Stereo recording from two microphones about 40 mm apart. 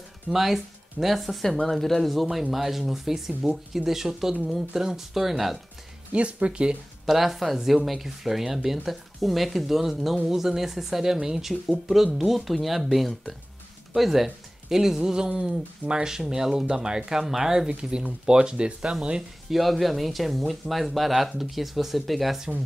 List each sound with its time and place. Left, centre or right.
0.3 s speech: centre
2.5 s speech: centre
6.1 s speech: right
7.1 s speech: centre
17.6 s speech: right
19.5 s speech: centre